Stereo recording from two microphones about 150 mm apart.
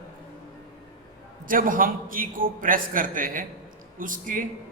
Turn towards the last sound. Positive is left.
turn(degrees=-65)  # may be behind; listen again after turning